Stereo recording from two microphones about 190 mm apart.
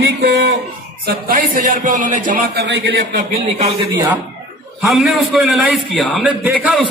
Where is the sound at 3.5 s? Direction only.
35° right (ahead or behind).